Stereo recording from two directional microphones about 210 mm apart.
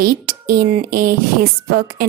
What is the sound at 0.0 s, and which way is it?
Speech, 45° right (ahead or behind).